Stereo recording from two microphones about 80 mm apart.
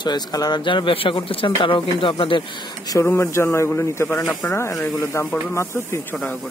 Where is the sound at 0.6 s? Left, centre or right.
Left.